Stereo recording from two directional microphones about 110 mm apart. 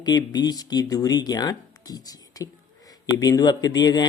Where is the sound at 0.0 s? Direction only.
40° left (ahead or behind).